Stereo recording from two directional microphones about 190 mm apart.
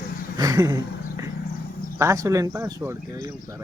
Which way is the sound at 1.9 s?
15° right (ahead or behind).